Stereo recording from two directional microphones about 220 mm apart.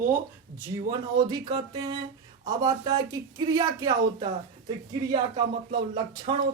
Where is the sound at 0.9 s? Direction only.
20° right (ahead or behind).